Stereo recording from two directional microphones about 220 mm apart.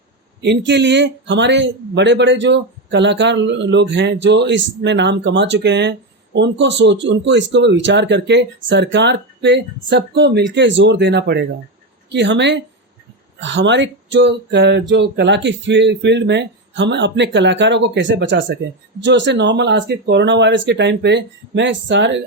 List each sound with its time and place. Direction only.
0.4 s speech: 50° right (ahead or behind)